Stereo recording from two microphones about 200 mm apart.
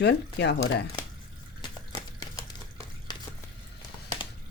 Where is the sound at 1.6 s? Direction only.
20° left (ahead or behind).